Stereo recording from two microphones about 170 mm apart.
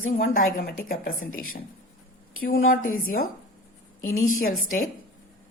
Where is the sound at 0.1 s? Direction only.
55° left (ahead or behind).